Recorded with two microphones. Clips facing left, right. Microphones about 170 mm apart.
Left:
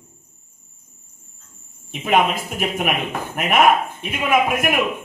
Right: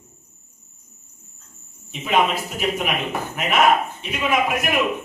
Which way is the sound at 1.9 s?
55° left (ahead or behind).